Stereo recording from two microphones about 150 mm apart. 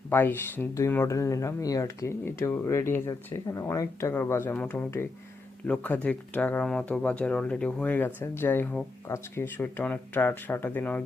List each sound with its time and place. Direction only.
0.1 s speech: 15° left (ahead or behind)